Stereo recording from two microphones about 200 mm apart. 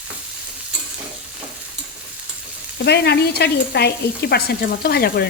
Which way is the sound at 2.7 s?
55° left (ahead or behind).